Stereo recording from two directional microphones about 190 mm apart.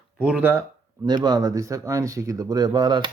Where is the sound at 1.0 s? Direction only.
20° right (ahead or behind).